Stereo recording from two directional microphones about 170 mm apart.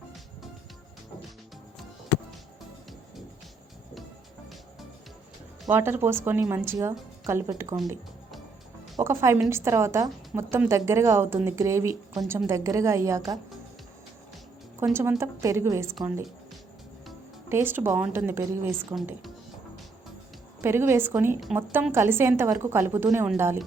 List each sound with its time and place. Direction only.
5.6 s a woman's voice: 15° right (ahead or behind)
9.0 s a woman's voice: 15° right (ahead or behind)
14.8 s a woman's voice: 15° right (ahead or behind)
17.5 s a woman's voice: 15° right (ahead or behind)
20.6 s a woman's voice: 15° right (ahead or behind)